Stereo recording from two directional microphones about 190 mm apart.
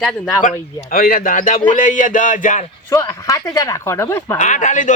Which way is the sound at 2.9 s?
15° left (ahead or behind).